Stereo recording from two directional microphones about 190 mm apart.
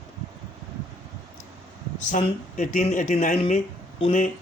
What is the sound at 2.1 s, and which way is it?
A man's voice, 40° left (ahead or behind).